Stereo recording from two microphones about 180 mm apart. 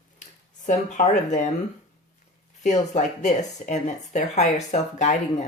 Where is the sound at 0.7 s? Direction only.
40° left (ahead or behind).